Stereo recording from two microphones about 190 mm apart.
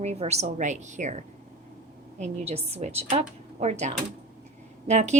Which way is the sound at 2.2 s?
35° right (ahead or behind).